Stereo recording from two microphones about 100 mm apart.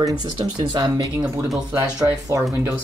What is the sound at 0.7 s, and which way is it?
Speech, 50° right (ahead or behind).